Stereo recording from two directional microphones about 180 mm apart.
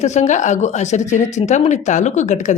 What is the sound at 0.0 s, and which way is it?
Speech, 40° left (ahead or behind).